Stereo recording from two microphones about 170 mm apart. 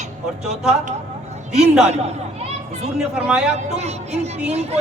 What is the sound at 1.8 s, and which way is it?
Speech, 40° right (ahead or behind).